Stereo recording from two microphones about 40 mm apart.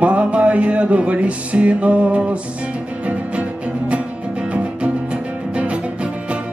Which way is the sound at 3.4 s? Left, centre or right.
Right.